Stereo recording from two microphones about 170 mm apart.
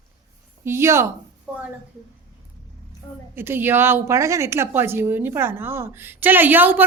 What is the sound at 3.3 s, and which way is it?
A woman's voice, 15° right (ahead or behind).